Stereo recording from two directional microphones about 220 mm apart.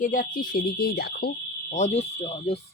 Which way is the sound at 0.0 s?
35° left (ahead or behind).